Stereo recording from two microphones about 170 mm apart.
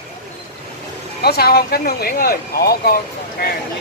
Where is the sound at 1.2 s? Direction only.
65° left (ahead or behind).